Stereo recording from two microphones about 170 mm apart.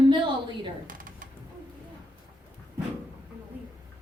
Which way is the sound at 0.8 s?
50° right (ahead or behind).